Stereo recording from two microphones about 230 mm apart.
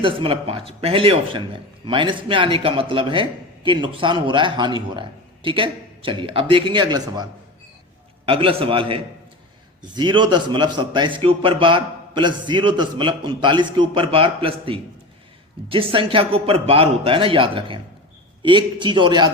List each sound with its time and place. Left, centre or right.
0.0 s a man's voice: right
8.3 s a man's voice: right